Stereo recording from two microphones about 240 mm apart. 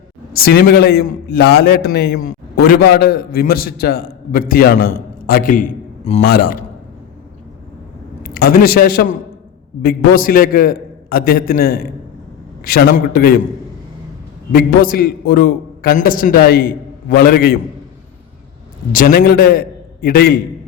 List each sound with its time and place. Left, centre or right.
0.3 s a man's voice: left
8.2 s a man's voice: left
14.5 s a man's voice: left
18.9 s a man's voice: left